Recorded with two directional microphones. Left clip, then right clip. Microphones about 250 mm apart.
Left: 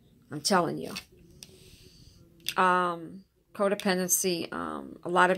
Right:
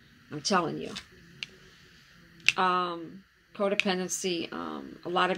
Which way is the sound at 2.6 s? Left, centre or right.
Left.